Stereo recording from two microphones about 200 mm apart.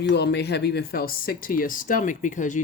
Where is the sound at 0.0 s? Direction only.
60° left (ahead or behind).